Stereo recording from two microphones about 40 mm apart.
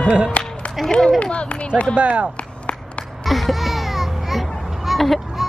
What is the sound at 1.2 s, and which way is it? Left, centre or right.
Speech, left.